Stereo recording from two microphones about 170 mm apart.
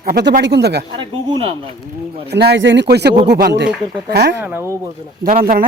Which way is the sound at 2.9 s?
75° right (ahead or behind).